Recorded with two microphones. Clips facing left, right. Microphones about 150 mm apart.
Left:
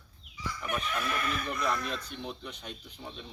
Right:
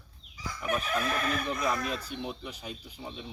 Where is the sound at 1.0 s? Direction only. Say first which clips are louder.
Right 3 dB; 40° right (ahead or behind).